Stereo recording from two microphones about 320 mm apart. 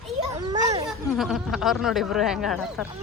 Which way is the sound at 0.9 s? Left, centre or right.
Centre.